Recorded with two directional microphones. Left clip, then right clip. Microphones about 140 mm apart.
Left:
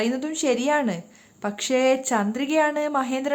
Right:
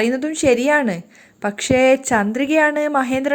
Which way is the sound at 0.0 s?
30° right (ahead or behind).